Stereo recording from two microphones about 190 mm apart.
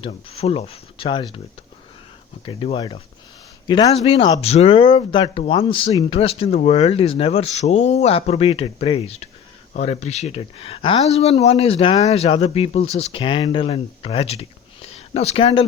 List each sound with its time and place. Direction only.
0.0 s speech: 30° left (ahead or behind)
2.4 s speech: 25° left (ahead or behind)